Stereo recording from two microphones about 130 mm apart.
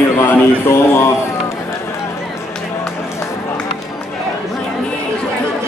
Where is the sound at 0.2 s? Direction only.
20° left (ahead or behind).